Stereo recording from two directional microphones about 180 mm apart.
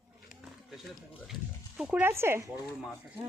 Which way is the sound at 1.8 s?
5° right (ahead or behind).